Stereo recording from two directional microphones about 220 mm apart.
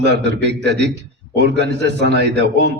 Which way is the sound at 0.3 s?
50° right (ahead or behind).